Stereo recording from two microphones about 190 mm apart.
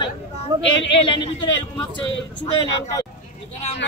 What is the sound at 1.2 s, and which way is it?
Speech, 25° left (ahead or behind).